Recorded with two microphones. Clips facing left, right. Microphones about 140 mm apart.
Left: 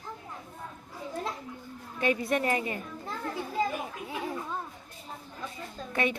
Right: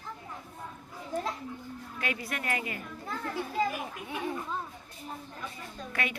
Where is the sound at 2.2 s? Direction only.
25° left (ahead or behind).